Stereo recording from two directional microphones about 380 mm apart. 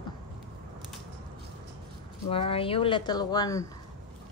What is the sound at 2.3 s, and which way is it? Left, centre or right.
Speech, centre.